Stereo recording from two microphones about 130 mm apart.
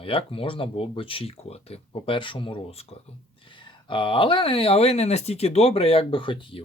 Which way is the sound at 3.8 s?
40° left (ahead or behind).